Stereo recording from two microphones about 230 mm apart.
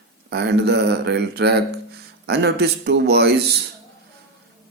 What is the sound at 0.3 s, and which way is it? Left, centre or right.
Speech, right.